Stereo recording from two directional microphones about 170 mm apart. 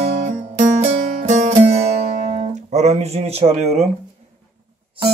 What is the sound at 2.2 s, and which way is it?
Speech, 40° right (ahead or behind).